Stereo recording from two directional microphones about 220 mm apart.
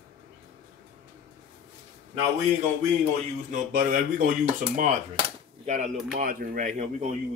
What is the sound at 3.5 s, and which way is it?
Speech, 40° right (ahead or behind).